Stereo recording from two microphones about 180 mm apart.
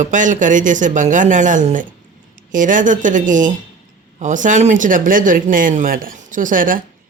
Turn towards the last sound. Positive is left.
turn(degrees=-50)  # may be behind; listen again after turning